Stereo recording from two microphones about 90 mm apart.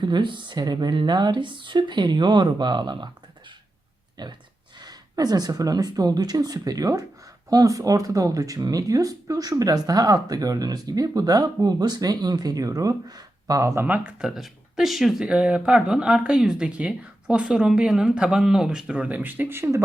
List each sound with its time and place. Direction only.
0.0 s speech: 60° right (ahead or behind)
4.2 s speech: 55° right (ahead or behind); by 13.8 s 35° right (ahead or behind)
13.8 s speech: 15° right (ahead or behind)